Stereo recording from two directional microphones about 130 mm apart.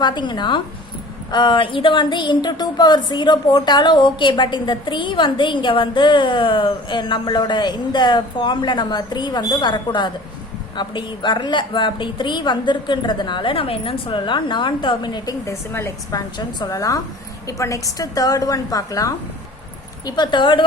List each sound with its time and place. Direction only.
0.0 s a woman's voice: 35° left (ahead or behind)